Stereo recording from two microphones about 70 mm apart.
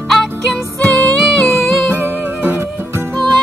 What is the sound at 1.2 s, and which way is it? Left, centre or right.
Music, centre.